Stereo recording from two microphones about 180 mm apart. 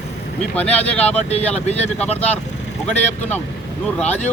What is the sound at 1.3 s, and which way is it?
Speech, 40° left (ahead or behind).